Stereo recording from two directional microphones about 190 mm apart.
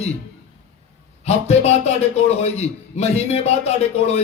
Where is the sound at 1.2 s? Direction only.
35° left (ahead or behind).